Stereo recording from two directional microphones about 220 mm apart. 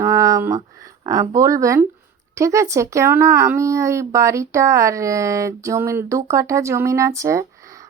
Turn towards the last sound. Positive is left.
turn(degrees=-15)  # may be behind; listen again after turning